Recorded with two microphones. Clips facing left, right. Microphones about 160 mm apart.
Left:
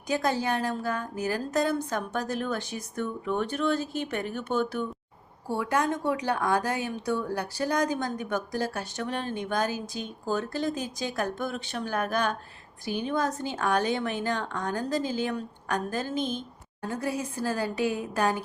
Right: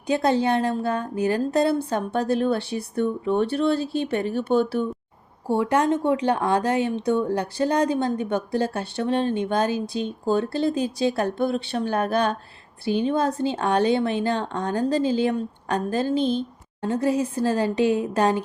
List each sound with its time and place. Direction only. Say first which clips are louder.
0.1 s speech: right 6 dB; 30° right (ahead or behind)